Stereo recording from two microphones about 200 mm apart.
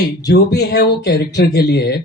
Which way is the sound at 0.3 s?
55° left (ahead or behind).